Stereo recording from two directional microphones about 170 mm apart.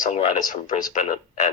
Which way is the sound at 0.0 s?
40° left (ahead or behind).